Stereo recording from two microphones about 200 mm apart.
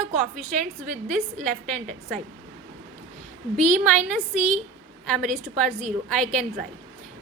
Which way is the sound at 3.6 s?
35° right (ahead or behind).